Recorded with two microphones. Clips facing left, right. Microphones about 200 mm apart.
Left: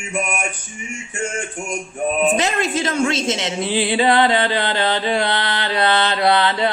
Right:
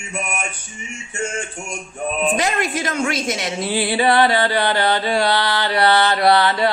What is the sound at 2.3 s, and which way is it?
Music, 25° left (ahead or behind).